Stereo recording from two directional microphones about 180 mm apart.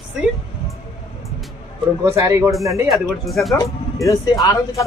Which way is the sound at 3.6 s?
20° left (ahead or behind).